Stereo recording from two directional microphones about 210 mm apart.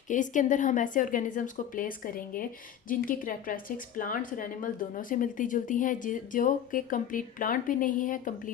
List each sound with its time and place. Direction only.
0.1 s a woman's voice: 35° left (ahead or behind)